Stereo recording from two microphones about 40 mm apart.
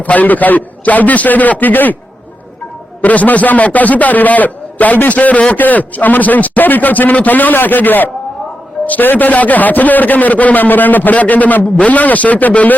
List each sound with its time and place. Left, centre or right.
0.0 s a man's voice: left
3.0 s a man's voice: left
11.6 s a man's voice: left
11.9 s a man's voice: left